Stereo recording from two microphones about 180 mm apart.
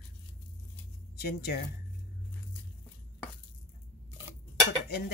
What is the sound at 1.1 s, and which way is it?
Speech, 60° left (ahead or behind).